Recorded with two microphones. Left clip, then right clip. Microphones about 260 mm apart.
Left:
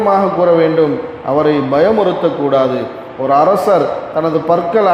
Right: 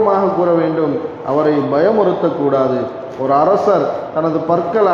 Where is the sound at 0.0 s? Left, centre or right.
Left.